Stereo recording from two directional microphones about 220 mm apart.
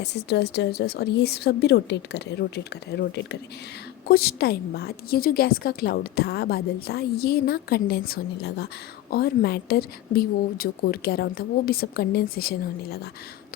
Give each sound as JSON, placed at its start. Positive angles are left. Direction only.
{"t": 0.0, "sound": "a woman's voice", "side_deg": 50}
{"t": 4.1, "sound": "a woman's voice", "side_deg": 45}